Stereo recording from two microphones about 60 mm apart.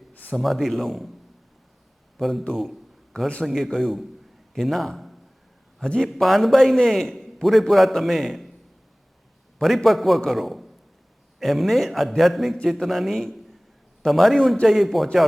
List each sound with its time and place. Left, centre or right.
0.1 s a sound: left
0.3 s a man's voice: centre
2.1 s a man's voice: centre
2.6 s a sound: centre
3.4 s a man's voice: centre
9.6 s a man's voice: centre